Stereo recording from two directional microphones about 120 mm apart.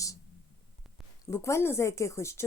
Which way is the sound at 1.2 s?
25° left (ahead or behind).